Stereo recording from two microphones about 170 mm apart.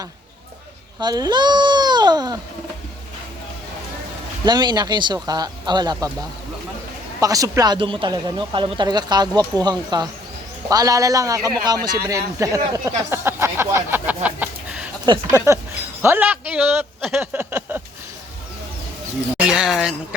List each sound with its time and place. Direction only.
0.9 s speech: 25° right (ahead or behind)
4.4 s speech: 25° right (ahead or behind)
7.2 s speech: 20° right (ahead or behind)
12.4 s a sound: 20° right (ahead or behind)
15.0 s speech: 25° right (ahead or behind)
16.0 s a man's voice: 10° right (ahead or behind)
17.5 s speech: 10° right (ahead or behind)
19.5 s a woman's voice: 5° right (ahead or behind)